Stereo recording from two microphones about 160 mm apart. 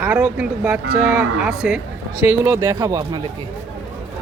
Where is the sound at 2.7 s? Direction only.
25° right (ahead or behind).